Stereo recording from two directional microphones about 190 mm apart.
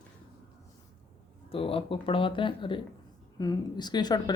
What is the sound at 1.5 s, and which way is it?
Speech, 30° left (ahead or behind).